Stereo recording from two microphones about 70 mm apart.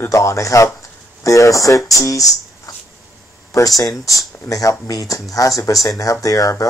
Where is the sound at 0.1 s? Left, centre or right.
Left.